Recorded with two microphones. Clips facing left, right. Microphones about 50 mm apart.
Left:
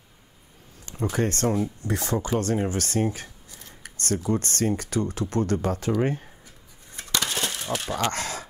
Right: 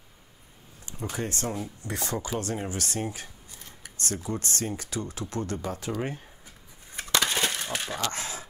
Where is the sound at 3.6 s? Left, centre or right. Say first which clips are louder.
Left 4 dB; left.